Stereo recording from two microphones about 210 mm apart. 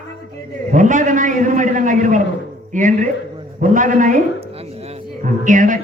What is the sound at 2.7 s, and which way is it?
A man's voice, 40° right (ahead or behind).